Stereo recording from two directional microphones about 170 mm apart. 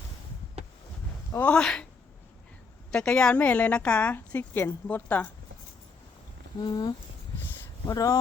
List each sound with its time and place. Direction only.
1.3 s speech: 10° left (ahead or behind)
2.9 s speech: 5° left (ahead or behind)
6.6 s speech: 25° left (ahead or behind)